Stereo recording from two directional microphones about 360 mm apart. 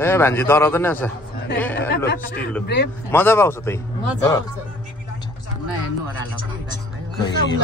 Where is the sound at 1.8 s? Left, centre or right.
Left.